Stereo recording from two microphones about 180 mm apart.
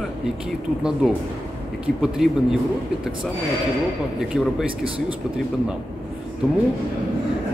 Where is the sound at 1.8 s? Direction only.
Centre (ahead or behind).